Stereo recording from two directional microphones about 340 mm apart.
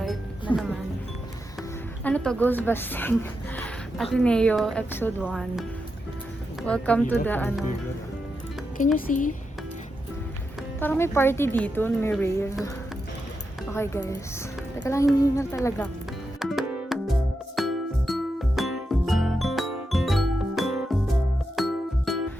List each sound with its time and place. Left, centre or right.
2.0 s a woman's voice: centre
9.0 s speech: left
10.8 s speech: centre
16.4 s music: centre